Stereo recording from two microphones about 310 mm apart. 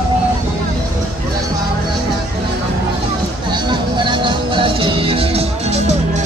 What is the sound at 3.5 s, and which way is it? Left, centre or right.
Music, centre.